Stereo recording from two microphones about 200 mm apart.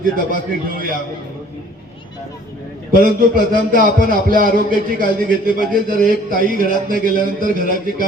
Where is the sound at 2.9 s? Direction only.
45° right (ahead or behind).